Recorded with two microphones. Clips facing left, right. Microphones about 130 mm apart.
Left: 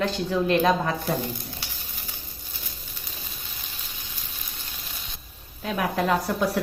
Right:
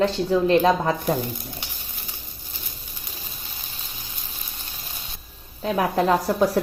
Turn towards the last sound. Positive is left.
turn(degrees=-35)  # may be behind; listen again after turning